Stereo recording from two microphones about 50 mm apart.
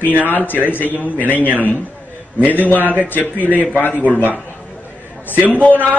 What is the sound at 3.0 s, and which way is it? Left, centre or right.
Speech, left.